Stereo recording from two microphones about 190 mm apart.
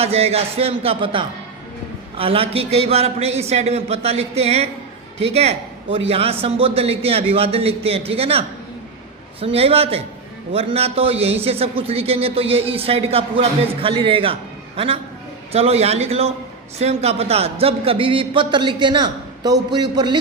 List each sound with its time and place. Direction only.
0.0 s a man's voice: 35° right (ahead or behind)